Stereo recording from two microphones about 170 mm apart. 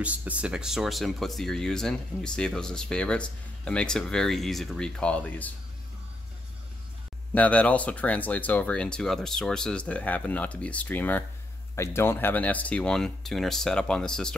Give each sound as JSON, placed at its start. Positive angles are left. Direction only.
{"t": 0.0, "sound": "speech", "side_deg": -10}
{"t": 7.3, "sound": "speech", "side_deg": 10}